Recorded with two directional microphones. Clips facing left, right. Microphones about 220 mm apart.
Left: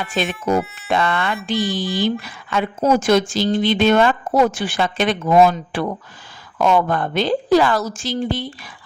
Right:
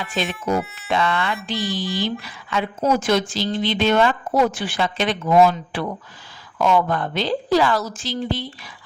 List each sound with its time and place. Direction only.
0.2 s speech: 50° left (ahead or behind)
0.6 s speech: centre (ahead or behind)
0.9 s speech: 50° left (ahead or behind)